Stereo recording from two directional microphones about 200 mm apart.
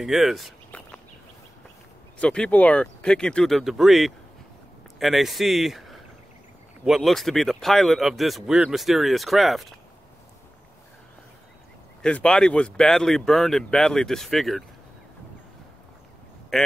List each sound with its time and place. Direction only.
0.0 s a sound: centre (ahead or behind)
2.1 s speech: 5° left (ahead or behind)
12.0 s speech: 5° left (ahead or behind)
16.5 s speech: centre (ahead or behind)